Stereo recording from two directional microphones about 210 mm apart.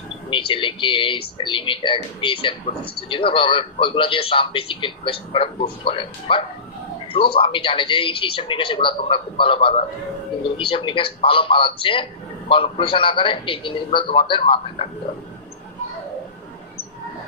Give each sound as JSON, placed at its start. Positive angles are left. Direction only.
{"t": 0.3, "sound": "a man's voice", "side_deg": 25}